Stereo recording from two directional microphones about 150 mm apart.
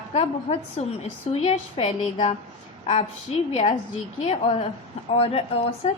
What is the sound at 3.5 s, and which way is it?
A woman's voice, 40° left (ahead or behind).